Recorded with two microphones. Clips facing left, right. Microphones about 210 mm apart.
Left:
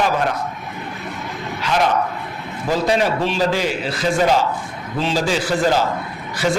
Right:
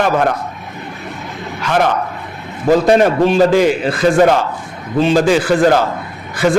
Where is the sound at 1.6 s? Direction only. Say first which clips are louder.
Right 4 dB; 55° right (ahead or behind).